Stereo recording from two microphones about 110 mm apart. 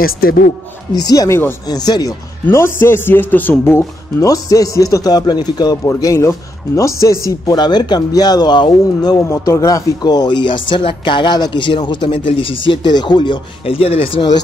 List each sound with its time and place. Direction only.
1.0 s speech: 35° left (ahead or behind)
2.4 s a man's voice: 20° left (ahead or behind); by 9.2 s 40° left (ahead or behind)
9.3 s speech: 25° left (ahead or behind); by 14.2 s 55° left (ahead or behind)